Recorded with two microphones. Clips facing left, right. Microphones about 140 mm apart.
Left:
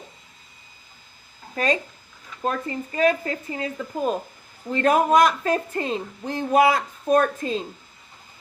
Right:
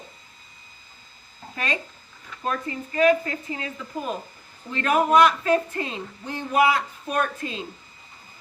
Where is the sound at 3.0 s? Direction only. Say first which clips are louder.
Right 2 dB; 35° left (ahead or behind).